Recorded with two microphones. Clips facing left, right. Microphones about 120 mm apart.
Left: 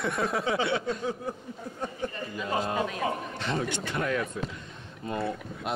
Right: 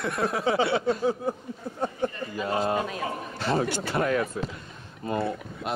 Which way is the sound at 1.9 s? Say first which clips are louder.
Right 4 dB; 35° right (ahead or behind).